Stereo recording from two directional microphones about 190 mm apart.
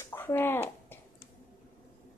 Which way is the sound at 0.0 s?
15° left (ahead or behind).